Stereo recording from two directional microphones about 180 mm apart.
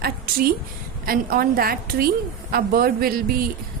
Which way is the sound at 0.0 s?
55° right (ahead or behind).